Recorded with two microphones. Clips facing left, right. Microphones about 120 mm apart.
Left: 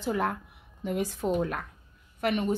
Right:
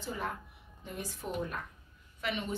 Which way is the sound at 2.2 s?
50° left (ahead or behind).